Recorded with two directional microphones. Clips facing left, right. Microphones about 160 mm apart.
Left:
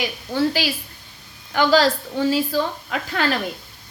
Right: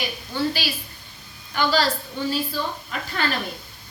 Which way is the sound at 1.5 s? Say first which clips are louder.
Left 5 dB; 90° left.